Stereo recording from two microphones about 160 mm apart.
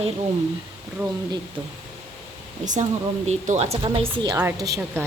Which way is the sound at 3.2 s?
45° right (ahead or behind).